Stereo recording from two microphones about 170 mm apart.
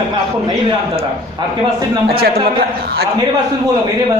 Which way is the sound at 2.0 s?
65° right (ahead or behind).